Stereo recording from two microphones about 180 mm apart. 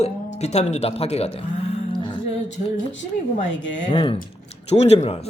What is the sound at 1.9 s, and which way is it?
Music, 25° left (ahead or behind).